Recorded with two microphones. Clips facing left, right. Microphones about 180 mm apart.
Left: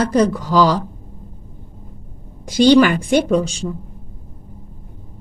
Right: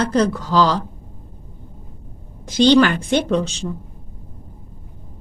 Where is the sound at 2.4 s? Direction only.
10° left (ahead or behind).